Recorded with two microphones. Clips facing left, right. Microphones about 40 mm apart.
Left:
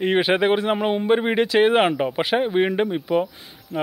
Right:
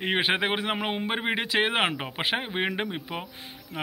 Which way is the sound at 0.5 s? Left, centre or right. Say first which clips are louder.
Left 8 dB; centre.